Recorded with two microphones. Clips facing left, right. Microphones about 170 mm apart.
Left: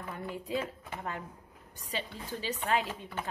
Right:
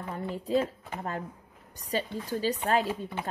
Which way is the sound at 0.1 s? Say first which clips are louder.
Right 7 dB; 35° right (ahead or behind).